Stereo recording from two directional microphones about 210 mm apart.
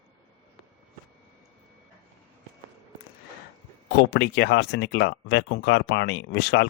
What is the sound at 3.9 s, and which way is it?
Speech, 55° left (ahead or behind).